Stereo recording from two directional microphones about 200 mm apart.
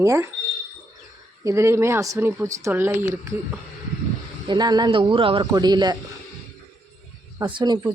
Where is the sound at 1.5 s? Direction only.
15° right (ahead or behind).